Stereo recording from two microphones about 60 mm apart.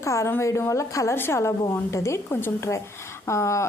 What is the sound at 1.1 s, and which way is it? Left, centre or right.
A woman's voice, left.